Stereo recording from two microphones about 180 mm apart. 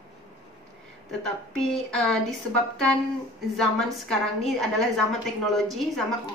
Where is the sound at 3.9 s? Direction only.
Centre (ahead or behind).